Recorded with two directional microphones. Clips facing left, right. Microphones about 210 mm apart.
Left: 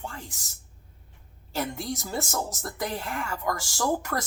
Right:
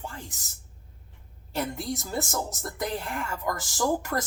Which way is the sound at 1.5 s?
Centre (ahead or behind).